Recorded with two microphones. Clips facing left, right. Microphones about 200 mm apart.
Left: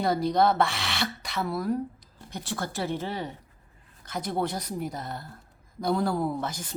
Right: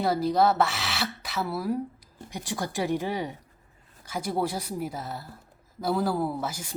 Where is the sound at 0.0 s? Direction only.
5° right (ahead or behind).